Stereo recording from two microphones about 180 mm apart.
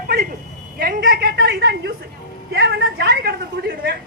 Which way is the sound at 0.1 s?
50° right (ahead or behind).